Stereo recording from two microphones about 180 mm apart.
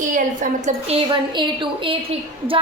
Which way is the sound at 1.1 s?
30° right (ahead or behind).